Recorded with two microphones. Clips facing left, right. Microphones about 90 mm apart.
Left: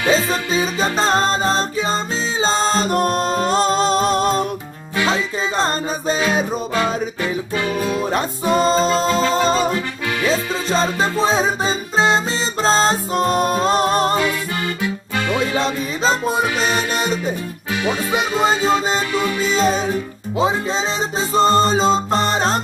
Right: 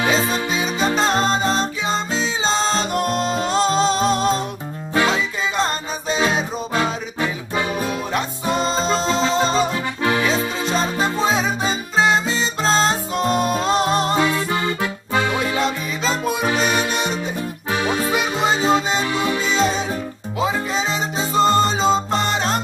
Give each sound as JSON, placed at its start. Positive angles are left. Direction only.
{"t": 0.1, "sound": "music", "side_deg": 35}
{"t": 5.1, "sound": "music", "side_deg": 35}
{"t": 8.1, "sound": "music", "side_deg": 40}
{"t": 10.7, "sound": "music", "side_deg": 35}
{"t": 15.5, "sound": "music", "side_deg": 35}
{"t": 19.4, "sound": "music", "side_deg": 40}
{"t": 20.3, "sound": "music", "side_deg": 30}